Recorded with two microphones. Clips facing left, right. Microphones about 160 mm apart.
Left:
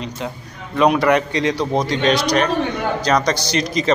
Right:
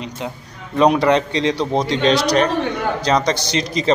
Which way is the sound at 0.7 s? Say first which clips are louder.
Right 1 dB; 30° right (ahead or behind).